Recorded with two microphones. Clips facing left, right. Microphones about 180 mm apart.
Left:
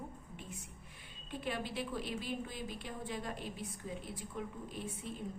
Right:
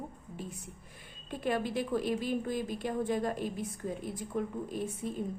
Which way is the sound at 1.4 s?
50° right (ahead or behind).